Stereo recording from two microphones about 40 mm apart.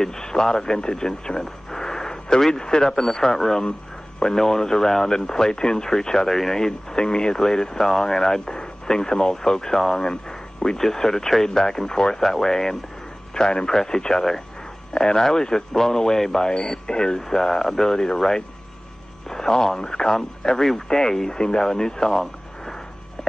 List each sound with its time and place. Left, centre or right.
0.0 s speech: centre